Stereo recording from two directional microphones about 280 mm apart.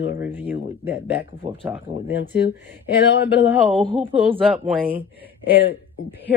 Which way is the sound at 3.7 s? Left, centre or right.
Centre.